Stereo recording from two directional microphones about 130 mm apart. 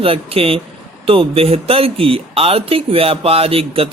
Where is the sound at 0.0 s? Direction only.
45° right (ahead or behind).